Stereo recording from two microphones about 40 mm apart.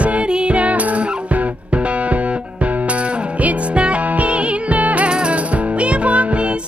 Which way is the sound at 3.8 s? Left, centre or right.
Right.